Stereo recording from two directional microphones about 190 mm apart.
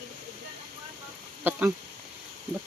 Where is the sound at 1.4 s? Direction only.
10° right (ahead or behind).